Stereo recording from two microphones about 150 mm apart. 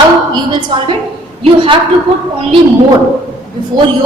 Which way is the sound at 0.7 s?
30° right (ahead or behind).